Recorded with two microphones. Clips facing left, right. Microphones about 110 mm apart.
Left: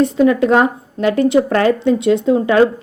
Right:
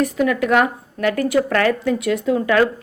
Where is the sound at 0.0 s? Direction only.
25° left (ahead or behind).